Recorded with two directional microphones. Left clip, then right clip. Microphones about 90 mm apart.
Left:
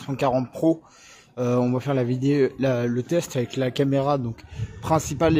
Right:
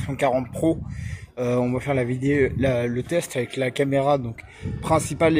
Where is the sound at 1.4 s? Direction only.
80° left; by 2.8 s 65° left (ahead or behind).